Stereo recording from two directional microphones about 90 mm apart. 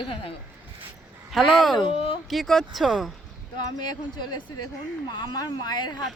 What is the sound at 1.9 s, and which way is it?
Speech, 85° left.